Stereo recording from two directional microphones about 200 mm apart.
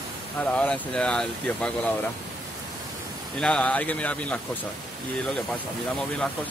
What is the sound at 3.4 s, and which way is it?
Speech, 5° left (ahead or behind).